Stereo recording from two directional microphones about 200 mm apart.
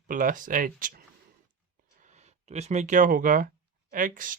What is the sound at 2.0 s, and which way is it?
Speech, 35° right (ahead or behind).